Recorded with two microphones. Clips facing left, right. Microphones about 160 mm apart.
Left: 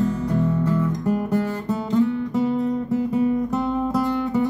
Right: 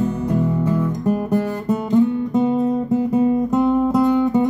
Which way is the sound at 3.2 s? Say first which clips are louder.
Right 5 dB; 20° right (ahead or behind).